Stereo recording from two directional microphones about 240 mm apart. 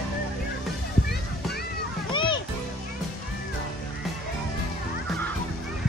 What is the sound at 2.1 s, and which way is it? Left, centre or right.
Music, centre.